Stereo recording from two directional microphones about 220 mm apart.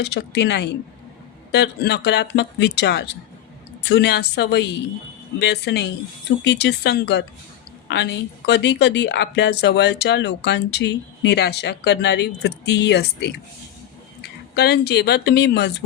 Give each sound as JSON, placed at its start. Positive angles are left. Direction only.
{"t": 0.0, "sound": "speech", "side_deg": 50}